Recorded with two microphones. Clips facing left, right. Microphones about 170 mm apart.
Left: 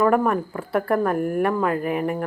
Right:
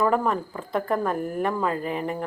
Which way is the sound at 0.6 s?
10° left (ahead or behind).